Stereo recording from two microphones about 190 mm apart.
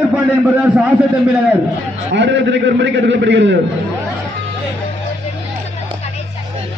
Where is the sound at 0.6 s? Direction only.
5° right (ahead or behind).